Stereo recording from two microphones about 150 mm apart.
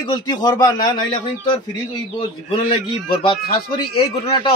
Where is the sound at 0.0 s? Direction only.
30° left (ahead or behind).